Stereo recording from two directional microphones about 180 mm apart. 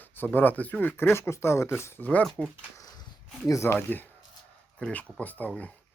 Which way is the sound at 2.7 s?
20° left (ahead or behind).